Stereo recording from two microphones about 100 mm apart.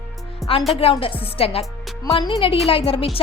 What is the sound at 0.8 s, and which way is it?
Speech, 70° left (ahead or behind).